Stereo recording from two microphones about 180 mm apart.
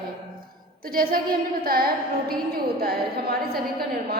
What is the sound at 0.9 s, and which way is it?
A woman's voice, 55° right (ahead or behind).